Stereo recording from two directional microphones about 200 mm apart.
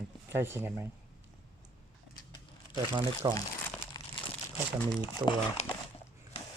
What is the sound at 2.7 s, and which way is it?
Speech, 25° right (ahead or behind).